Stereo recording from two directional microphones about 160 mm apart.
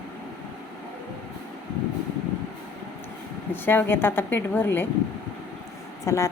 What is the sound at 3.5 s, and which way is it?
A woman's voice, 15° left (ahead or behind).